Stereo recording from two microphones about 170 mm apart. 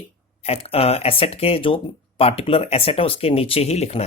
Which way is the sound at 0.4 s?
35° left (ahead or behind).